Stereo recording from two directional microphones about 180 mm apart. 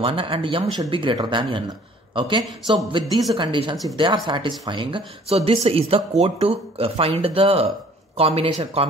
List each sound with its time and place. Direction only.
0.0 s speech: 30° right (ahead or behind)